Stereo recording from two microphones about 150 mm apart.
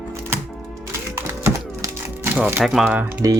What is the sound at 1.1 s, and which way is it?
Typing, 20° right (ahead or behind).